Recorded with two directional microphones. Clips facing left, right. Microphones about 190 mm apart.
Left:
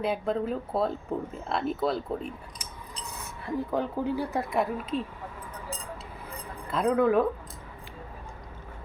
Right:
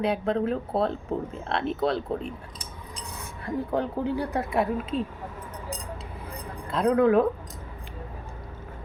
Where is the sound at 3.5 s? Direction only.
5° left (ahead or behind).